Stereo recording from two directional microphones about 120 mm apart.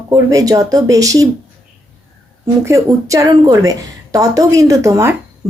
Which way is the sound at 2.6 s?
25° right (ahead or behind).